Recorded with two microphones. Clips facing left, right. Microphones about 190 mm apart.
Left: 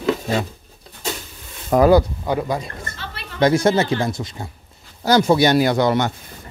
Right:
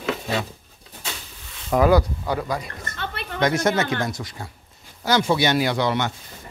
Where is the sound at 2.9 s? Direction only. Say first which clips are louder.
Right 4 dB; 55° right (ahead or behind).